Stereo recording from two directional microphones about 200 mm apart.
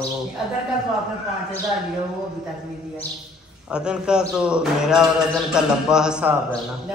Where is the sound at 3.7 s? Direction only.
5° right (ahead or behind).